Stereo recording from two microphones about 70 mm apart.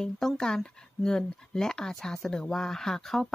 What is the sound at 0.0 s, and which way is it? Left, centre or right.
Speech, centre.